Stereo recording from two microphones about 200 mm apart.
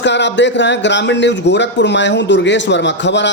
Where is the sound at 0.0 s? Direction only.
60° left (ahead or behind).